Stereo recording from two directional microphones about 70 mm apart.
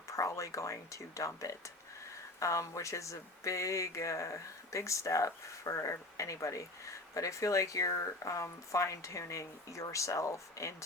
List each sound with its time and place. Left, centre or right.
0.1 s speech: left